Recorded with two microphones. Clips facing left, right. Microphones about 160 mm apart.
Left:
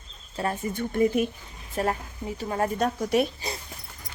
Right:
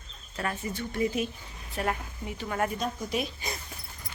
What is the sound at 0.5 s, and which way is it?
Speech, 50° left (ahead or behind).